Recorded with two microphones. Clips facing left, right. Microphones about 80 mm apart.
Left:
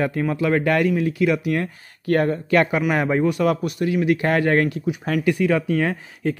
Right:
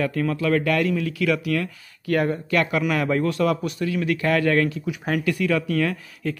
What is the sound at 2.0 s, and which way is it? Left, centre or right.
Speech, left.